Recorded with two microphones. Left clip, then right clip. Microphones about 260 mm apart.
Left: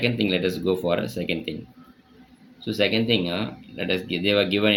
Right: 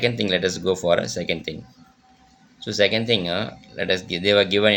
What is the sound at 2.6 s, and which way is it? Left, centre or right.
Speech, right.